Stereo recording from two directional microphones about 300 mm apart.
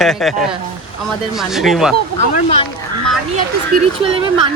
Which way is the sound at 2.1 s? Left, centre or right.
Left.